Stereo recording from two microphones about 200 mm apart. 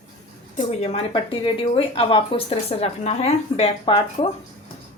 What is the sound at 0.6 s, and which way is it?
Speech, 30° left (ahead or behind).